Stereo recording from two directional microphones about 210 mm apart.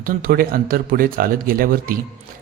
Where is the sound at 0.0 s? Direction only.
40° right (ahead or behind).